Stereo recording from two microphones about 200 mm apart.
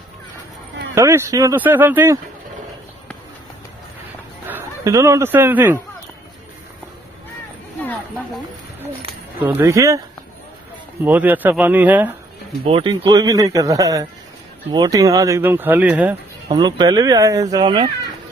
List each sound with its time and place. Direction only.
0.9 s speech: 15° right (ahead or behind)
4.5 s speech: 10° right (ahead or behind)
9.4 s speech: 10° right (ahead or behind)
12.6 s speech: 25° right (ahead or behind); by 16.2 s 10° right (ahead or behind)
16.5 s speech: 20° right (ahead or behind)